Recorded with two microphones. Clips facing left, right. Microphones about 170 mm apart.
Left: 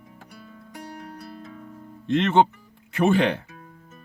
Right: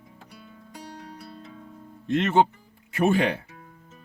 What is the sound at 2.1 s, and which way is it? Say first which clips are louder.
Speech: left 2 dB; 5° right (ahead or behind).